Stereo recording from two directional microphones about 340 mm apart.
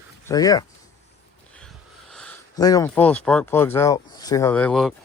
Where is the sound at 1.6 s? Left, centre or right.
Centre.